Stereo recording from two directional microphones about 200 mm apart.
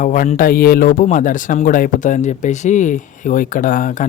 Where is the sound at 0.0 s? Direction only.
40° left (ahead or behind).